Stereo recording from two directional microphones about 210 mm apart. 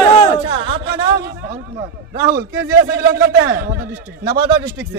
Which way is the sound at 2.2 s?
50° right (ahead or behind).